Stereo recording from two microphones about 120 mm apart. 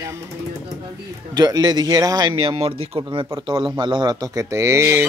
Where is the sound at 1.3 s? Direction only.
30° right (ahead or behind).